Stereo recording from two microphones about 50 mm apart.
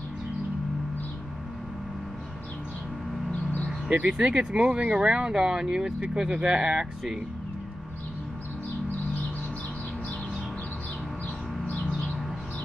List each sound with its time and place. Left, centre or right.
4.0 s speech: centre